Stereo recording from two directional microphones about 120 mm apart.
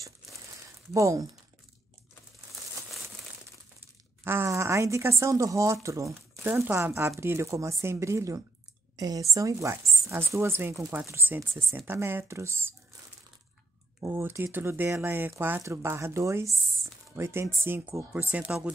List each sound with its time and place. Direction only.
0.9 s a woman's voice: 25° right (ahead or behind)
4.2 s a woman's voice: 20° right (ahead or behind)
14.0 s a woman's voice: 20° right (ahead or behind)